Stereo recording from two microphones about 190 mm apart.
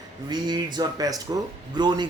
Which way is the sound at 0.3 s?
20° right (ahead or behind).